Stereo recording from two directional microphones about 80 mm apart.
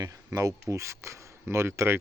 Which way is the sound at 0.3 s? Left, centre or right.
Right.